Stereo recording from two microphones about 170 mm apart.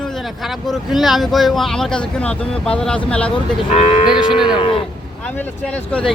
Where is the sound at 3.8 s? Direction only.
35° left (ahead or behind).